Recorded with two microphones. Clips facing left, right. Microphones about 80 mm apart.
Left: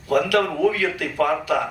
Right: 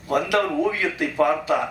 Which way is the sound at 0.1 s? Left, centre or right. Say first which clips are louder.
Left 2 dB; right.